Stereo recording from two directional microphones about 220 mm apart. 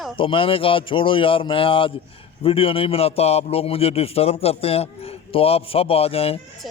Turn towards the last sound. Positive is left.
turn(degrees=25)  # may be behind; listen again after turning